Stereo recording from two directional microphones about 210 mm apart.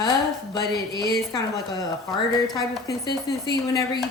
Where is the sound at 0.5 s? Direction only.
20° left (ahead or behind).